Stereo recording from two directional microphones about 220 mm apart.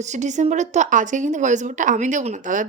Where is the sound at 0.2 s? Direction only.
35° right (ahead or behind).